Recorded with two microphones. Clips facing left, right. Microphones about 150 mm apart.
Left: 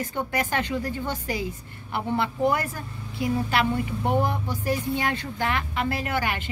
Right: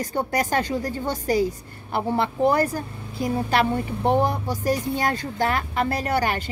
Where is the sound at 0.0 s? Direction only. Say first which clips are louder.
Right 3 dB; 40° right (ahead or behind).